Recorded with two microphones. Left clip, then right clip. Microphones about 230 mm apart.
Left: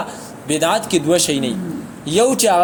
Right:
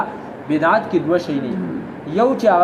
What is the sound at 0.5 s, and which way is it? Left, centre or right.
Speech, left.